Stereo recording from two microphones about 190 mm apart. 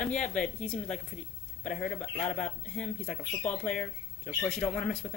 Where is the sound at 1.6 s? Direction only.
35° left (ahead or behind).